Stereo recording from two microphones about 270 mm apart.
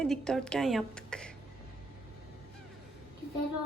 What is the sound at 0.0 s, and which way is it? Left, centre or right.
Female singing, centre.